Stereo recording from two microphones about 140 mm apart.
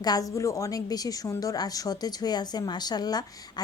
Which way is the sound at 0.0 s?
25° left (ahead or behind).